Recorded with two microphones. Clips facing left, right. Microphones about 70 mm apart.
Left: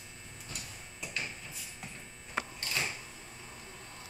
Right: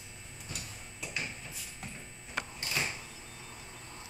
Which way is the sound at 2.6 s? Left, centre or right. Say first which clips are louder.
Right 1 dB; centre.